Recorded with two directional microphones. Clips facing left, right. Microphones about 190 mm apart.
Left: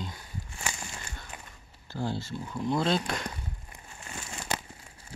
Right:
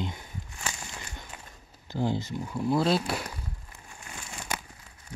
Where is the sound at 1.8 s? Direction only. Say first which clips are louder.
Right 4 dB; 15° right (ahead or behind).